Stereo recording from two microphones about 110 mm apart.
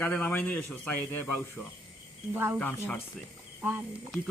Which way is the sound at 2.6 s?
20° left (ahead or behind).